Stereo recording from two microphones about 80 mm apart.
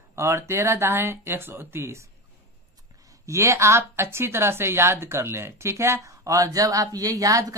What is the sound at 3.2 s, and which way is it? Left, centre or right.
A woman's voice, right.